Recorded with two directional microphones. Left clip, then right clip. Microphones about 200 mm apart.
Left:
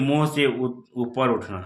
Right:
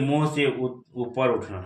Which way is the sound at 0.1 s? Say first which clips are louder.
Left 2 dB; 40° left (ahead or behind).